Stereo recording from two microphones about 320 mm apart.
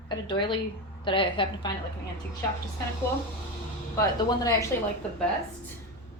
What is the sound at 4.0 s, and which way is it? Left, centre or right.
Speech, centre.